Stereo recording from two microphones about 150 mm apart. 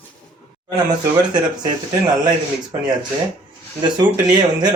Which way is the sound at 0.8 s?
30° right (ahead or behind).